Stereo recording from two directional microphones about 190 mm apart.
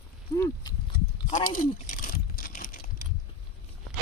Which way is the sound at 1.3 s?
45° left (ahead or behind).